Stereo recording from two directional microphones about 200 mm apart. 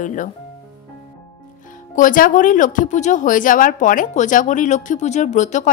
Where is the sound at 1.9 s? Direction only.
40° left (ahead or behind).